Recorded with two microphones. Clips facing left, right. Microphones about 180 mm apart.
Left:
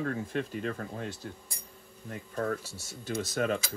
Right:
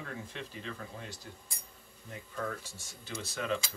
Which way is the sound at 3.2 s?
45° left (ahead or behind).